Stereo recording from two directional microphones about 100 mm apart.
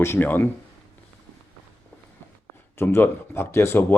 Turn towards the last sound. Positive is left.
turn(degrees=25)  # may be behind; listen again after turning